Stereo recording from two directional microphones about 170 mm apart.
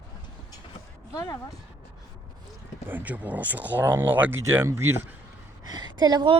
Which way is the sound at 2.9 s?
10° right (ahead or behind).